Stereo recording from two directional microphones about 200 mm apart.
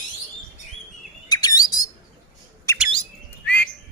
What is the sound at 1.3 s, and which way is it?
Chirp, 20° left (ahead or behind).